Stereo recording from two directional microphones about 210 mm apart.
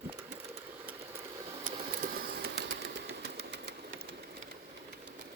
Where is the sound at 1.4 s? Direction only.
25° right (ahead or behind).